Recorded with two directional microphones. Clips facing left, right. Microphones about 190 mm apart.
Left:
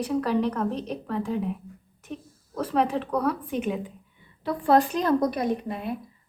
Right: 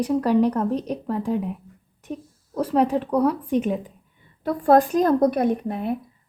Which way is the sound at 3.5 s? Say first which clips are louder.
Right 5 dB; 35° right (ahead or behind).